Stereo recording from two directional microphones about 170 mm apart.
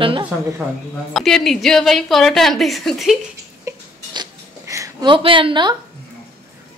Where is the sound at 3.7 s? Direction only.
20° right (ahead or behind).